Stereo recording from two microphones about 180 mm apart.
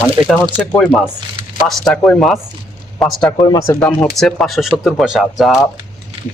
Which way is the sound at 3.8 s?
5° left (ahead or behind).